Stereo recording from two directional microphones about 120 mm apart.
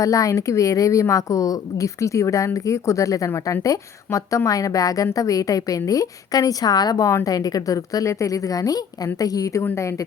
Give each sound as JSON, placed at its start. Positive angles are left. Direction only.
{"t": 0.0, "sound": "a woman's voice", "side_deg": 25}